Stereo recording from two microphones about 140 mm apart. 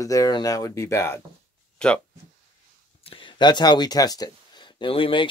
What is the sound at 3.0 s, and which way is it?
Speech, 40° left (ahead or behind).